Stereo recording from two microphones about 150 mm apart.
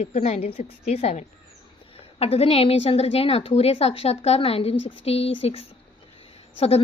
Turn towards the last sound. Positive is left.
turn(degrees=45)  # may be behind; listen again after turning